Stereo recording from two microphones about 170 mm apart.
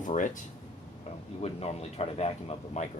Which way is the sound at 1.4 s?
35° left (ahead or behind).